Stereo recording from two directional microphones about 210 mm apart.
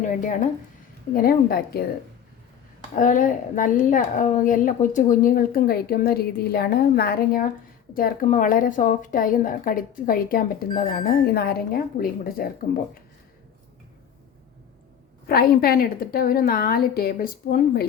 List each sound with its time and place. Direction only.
0.0 s a woman's voice: 40° left (ahead or behind)
3.0 s a woman's voice: 40° left (ahead or behind)
15.3 s a woman's voice: 45° left (ahead or behind)